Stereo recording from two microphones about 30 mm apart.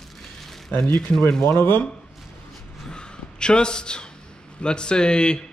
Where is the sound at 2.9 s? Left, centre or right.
Left.